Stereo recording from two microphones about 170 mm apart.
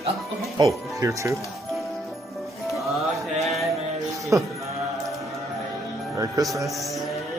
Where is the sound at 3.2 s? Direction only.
Centre (ahead or behind).